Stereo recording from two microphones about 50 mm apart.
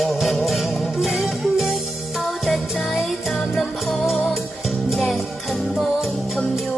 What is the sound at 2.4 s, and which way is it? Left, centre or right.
Music, centre.